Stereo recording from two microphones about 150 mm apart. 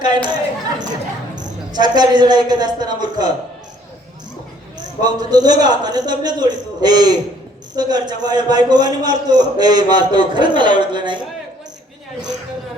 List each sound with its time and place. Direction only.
0.0 s speech: 30° right (ahead or behind)
1.4 s a man's voice: 30° right (ahead or behind)
4.8 s a man's voice: 25° right (ahead or behind)